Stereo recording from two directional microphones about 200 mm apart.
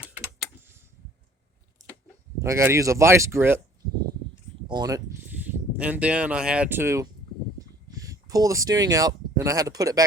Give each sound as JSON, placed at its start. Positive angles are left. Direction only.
{"t": 2.4, "sound": "speech", "side_deg": -15}
{"t": 4.7, "sound": "speech", "side_deg": -20}
{"t": 5.7, "sound": "speech", "side_deg": -5}